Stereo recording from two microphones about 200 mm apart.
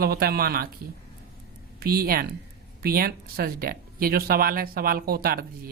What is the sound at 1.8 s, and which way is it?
Speech, 50° right (ahead or behind).